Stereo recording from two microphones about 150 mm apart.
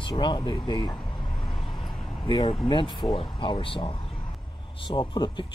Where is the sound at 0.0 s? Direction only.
30° left (ahead or behind).